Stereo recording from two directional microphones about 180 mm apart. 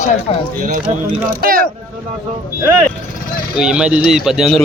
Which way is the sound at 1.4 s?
55° right (ahead or behind).